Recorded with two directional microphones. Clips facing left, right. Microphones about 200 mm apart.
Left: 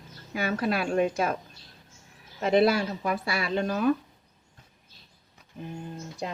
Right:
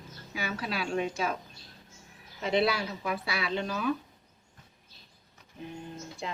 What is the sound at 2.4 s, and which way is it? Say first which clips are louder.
A woman's voice: left 6 dB; 50° left (ahead or behind).